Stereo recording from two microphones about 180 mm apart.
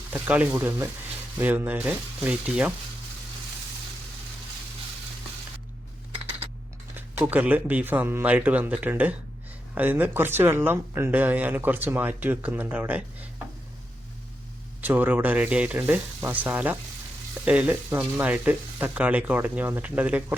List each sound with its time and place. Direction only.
0.1 s speech: 10° right (ahead or behind)
6.9 s speech: 10° right (ahead or behind)
14.8 s speech: 10° right (ahead or behind)